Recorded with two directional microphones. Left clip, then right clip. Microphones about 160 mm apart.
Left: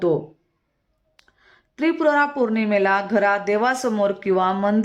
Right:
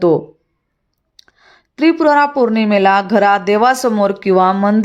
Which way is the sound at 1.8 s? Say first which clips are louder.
Right 7 dB; 30° right (ahead or behind).